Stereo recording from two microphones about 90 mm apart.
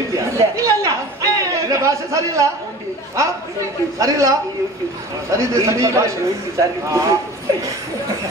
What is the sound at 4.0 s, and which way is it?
Speech, 40° right (ahead or behind).